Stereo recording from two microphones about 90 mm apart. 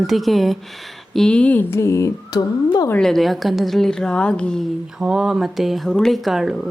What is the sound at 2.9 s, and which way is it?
Speech, 5° left (ahead or behind).